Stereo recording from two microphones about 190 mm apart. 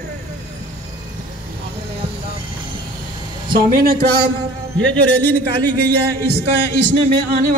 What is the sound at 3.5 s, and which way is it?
Speech, 45° right (ahead or behind).